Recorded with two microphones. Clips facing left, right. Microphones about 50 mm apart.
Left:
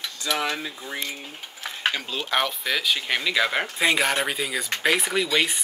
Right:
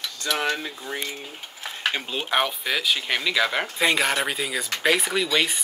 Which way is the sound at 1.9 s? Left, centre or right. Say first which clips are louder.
Even; right.